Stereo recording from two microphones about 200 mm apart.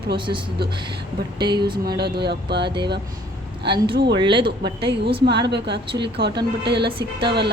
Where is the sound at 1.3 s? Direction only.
20° right (ahead or behind).